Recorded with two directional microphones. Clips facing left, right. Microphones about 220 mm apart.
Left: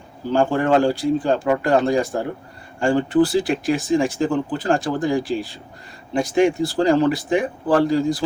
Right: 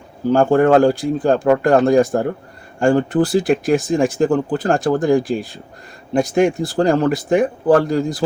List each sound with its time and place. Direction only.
0.3 s speech: 50° right (ahead or behind)